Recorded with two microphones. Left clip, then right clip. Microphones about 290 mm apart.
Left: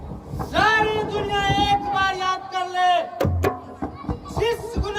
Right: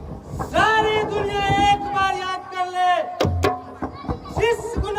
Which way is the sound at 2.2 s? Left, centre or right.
Centre.